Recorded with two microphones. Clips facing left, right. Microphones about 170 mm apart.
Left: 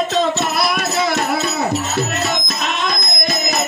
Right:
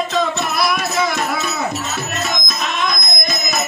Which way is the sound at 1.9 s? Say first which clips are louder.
Left 3 dB; 65° left (ahead or behind).